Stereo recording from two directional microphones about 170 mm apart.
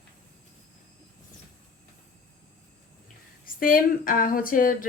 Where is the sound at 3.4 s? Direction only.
55° left (ahead or behind).